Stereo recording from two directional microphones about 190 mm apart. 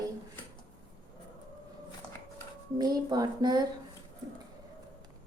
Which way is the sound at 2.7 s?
20° right (ahead or behind).